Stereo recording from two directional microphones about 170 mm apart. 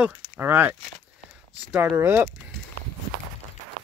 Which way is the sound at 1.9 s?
15° right (ahead or behind).